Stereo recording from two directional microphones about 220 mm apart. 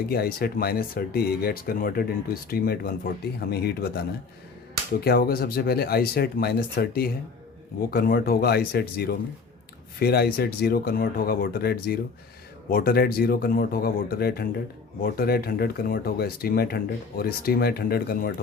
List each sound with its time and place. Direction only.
0.1 s speech: 45° left (ahead or behind)
5.0 s speech: 45° left (ahead or behind)